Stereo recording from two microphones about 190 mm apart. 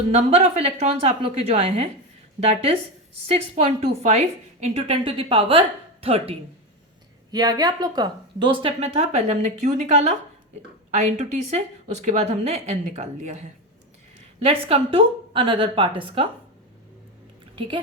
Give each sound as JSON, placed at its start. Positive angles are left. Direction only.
{"t": 0.1, "sound": "a woman's voice", "side_deg": -35}
{"t": 7.3, "sound": "speech", "side_deg": -20}
{"t": 14.4, "sound": "a woman's voice", "side_deg": -30}